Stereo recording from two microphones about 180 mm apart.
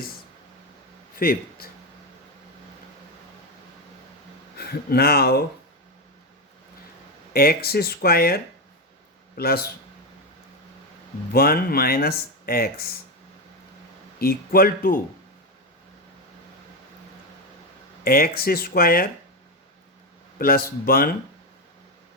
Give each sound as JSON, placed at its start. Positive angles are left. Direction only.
{"t": 1.1, "sound": "speech", "side_deg": 55}
{"t": 4.5, "sound": "speech", "side_deg": 60}
{"t": 7.3, "sound": "speech", "side_deg": 60}
{"t": 9.4, "sound": "speech", "side_deg": 60}
{"t": 11.3, "sound": "speech", "side_deg": 60}
{"t": 14.2, "sound": "speech", "side_deg": 55}
{"t": 18.0, "sound": "speech", "side_deg": 55}
{"t": 20.4, "sound": "speech", "side_deg": 55}